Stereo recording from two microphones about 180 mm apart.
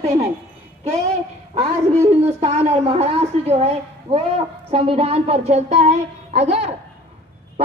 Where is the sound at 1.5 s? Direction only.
35° right (ahead or behind).